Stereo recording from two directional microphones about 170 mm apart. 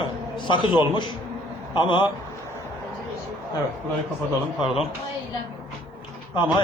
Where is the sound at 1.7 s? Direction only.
30° left (ahead or behind).